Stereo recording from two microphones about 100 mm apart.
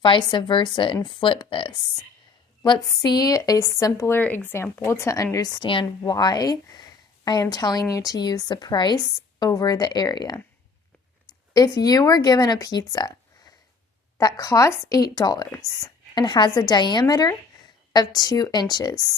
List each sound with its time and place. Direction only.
0.0 s speech: 55° left (ahead or behind)
2.6 s speech: 45° left (ahead or behind)
11.5 s speech: 40° left (ahead or behind)
14.2 s speech: 35° left (ahead or behind)